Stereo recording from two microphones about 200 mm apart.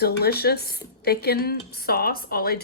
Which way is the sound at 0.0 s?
50° left (ahead or behind).